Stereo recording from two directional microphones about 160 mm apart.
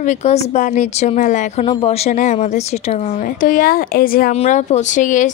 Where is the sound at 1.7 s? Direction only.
40° left (ahead or behind); by 4.3 s 65° left (ahead or behind).